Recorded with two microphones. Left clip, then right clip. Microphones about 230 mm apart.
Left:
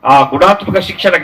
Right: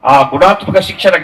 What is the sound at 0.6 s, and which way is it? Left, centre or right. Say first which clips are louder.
Speech: right 2 dB; left.